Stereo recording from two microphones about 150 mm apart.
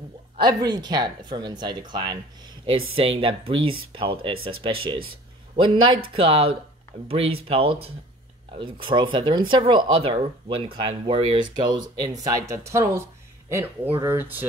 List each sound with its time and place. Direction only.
0.4 s speech: 25° right (ahead or behind)
6.1 s speech: 40° right (ahead or behind); by 14.4 s 15° right (ahead or behind)